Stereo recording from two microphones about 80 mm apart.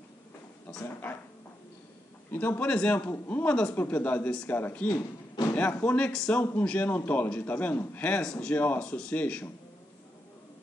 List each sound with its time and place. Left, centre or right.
2.3 s speech: left
2.7 s speech: centre
6.1 s speech: centre